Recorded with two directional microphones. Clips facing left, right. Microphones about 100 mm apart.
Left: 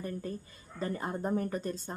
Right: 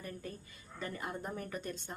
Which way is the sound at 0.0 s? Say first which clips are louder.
Left 7 dB; 35° left (ahead or behind).